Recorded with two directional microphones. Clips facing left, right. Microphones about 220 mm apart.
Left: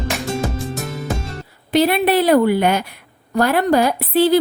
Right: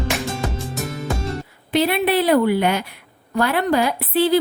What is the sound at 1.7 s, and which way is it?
A woman's voice, 40° left (ahead or behind).